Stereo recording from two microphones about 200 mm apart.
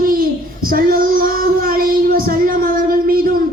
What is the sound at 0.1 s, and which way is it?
Child singing, 45° right (ahead or behind).